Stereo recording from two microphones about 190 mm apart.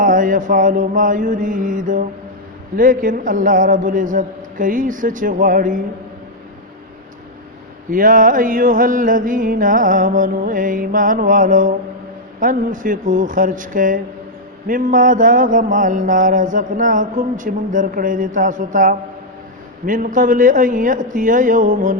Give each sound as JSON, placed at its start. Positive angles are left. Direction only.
{"t": 0.0, "sound": "mantra", "side_deg": -45}
{"t": 7.9, "sound": "mantra", "side_deg": -45}